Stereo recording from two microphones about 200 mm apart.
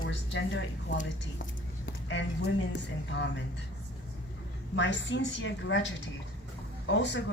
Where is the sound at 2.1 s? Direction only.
60° left (ahead or behind).